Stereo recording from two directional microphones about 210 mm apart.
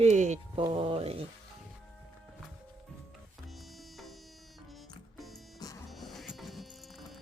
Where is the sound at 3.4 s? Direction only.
Centre (ahead or behind).